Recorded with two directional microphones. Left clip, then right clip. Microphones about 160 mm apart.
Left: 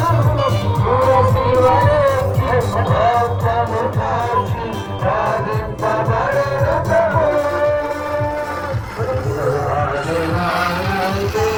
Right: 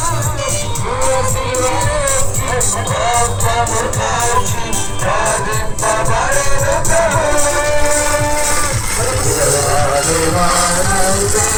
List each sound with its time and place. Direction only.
0.0 s music: 5° left (ahead or behind)
5.8 s music: 10° left (ahead or behind)
10.4 s music: 45° right (ahead or behind)